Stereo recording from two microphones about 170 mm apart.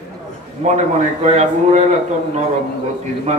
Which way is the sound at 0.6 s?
40° right (ahead or behind).